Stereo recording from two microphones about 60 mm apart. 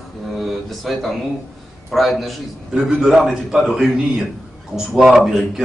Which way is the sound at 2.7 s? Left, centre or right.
Centre.